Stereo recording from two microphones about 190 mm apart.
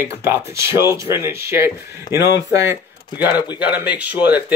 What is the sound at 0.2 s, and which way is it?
Speech, 15° right (ahead or behind).